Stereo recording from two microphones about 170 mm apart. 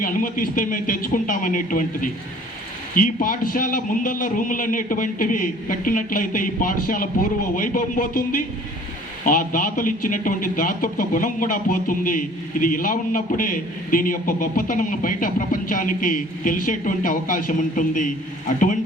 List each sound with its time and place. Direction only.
0.0 s speech: 50° left (ahead or behind)